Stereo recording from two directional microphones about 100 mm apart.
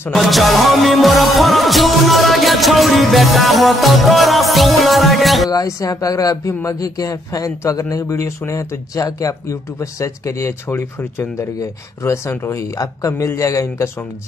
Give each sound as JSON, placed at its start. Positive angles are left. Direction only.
{"t": 0.1, "sound": "music", "side_deg": 0}
{"t": 5.5, "sound": "speech", "side_deg": 35}